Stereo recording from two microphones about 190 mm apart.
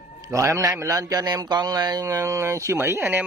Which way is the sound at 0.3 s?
15° right (ahead or behind).